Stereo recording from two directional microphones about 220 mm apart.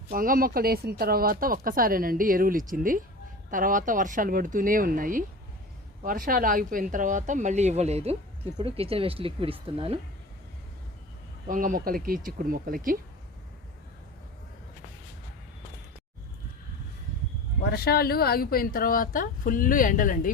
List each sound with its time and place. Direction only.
0.1 s speech: 40° right (ahead or behind)
11.4 s speech: 40° right (ahead or behind)
17.6 s speech: 45° left (ahead or behind)